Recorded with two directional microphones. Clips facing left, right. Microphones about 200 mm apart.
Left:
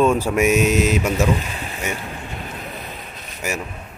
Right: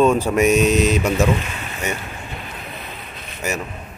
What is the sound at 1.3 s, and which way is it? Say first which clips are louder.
Speech: even; 35° left (ahead or behind).